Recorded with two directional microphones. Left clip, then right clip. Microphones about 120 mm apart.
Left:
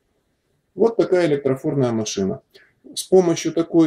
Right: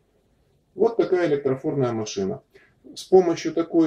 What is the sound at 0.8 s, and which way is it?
Speech, 20° left (ahead or behind).